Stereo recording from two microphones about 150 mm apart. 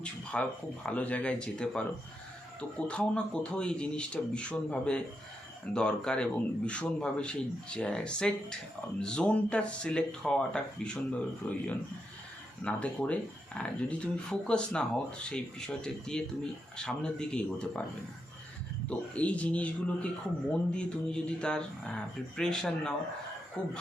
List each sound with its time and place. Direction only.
0.0 s a sound: 10° left (ahead or behind)
0.9 s speech: 10° left (ahead or behind)
12.6 s speech: 10° left (ahead or behind)
18.9 s speech: 10° left (ahead or behind)